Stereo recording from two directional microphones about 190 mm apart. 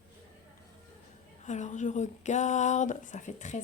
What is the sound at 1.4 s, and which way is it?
A woman's voice, 40° left (ahead or behind).